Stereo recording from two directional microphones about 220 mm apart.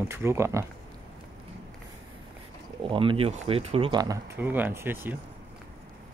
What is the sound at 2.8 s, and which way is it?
Speech, 20° right (ahead or behind).